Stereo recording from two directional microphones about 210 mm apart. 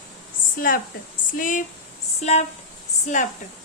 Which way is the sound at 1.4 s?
40° left (ahead or behind).